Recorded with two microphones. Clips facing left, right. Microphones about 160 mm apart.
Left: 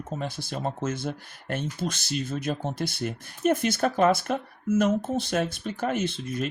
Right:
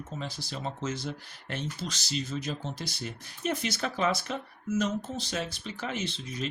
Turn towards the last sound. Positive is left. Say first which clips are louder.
# left 6 dB
turn(degrees=55)  # may be behind; listen again after turning